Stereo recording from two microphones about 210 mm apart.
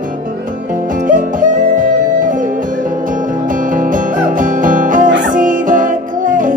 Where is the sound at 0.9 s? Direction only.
40° right (ahead or behind).